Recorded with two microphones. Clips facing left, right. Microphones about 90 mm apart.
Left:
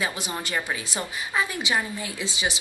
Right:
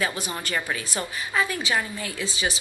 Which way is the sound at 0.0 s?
15° left (ahead or behind).